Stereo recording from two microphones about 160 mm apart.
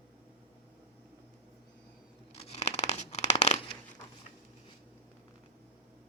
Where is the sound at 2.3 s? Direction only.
40° left (ahead or behind).